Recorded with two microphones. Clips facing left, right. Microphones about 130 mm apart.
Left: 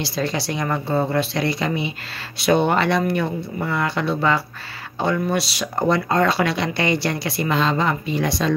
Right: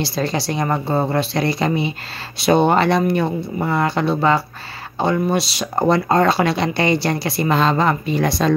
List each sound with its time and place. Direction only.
0.0 s speech: 35° right (ahead or behind)